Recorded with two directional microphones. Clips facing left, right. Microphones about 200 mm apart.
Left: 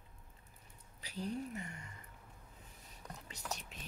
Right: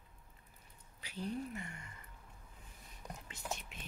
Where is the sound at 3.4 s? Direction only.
40° left (ahead or behind).